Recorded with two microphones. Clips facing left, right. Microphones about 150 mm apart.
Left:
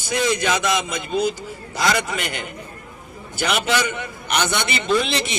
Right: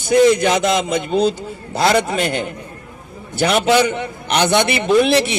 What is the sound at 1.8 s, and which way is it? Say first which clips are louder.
Speech: right 6 dB; 30° right (ahead or behind).